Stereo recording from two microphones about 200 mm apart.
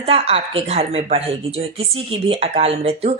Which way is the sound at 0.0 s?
30° right (ahead or behind).